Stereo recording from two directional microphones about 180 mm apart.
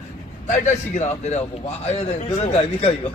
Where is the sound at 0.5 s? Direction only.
40° left (ahead or behind).